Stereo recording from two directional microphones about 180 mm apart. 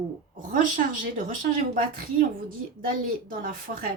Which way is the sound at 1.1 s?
45° right (ahead or behind).